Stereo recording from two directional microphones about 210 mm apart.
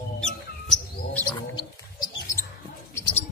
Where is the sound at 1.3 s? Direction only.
20° left (ahead or behind).